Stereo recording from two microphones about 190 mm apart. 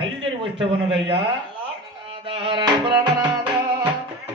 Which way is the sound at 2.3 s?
25° right (ahead or behind).